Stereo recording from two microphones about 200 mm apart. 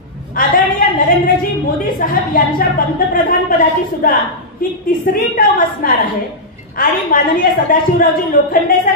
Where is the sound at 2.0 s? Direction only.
45° left (ahead or behind).